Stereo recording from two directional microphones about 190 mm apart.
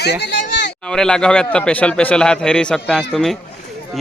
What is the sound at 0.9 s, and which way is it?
A man's voice, 5° left (ahead or behind).